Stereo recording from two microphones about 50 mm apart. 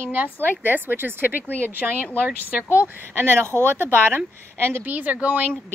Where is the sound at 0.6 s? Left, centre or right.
Right.